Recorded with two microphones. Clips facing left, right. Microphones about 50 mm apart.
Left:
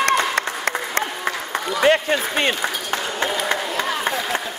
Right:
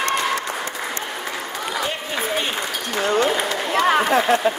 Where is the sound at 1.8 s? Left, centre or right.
Left.